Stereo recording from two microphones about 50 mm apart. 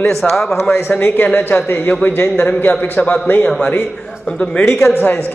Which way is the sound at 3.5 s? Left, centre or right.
Centre.